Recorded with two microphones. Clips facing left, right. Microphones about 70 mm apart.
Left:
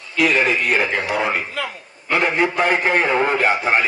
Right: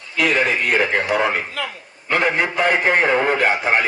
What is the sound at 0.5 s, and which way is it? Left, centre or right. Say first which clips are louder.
Speech: right 1 dB; right.